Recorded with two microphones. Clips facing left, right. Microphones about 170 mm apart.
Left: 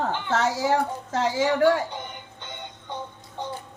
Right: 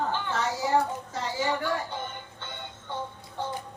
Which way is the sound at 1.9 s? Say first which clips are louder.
Even; 15° left (ahead or behind).